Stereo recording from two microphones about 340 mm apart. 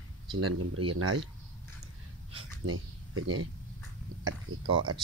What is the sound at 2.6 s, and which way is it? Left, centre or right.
Speech, right.